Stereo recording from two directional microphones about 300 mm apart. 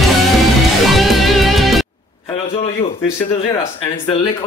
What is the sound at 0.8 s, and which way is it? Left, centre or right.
Music, centre.